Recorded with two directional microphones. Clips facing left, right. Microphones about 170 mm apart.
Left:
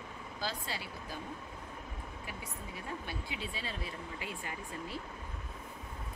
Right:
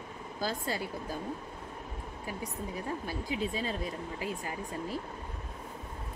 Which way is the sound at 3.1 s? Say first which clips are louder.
Right 8 dB; 40° right (ahead or behind).